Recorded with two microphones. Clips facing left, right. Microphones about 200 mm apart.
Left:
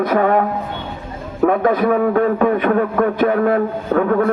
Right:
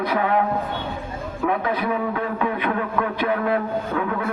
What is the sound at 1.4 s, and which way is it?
A man's voice, 45° left (ahead or behind).